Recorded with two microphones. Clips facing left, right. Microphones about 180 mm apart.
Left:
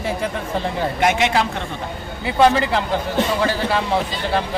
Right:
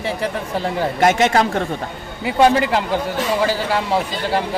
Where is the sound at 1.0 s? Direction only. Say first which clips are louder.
Right 4 dB; 45° right (ahead or behind).